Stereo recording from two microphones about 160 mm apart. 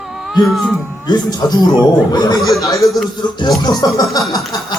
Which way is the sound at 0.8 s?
15° right (ahead or behind).